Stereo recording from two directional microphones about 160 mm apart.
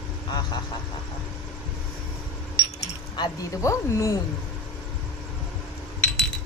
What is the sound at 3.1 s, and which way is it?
Speech, 25° left (ahead or behind).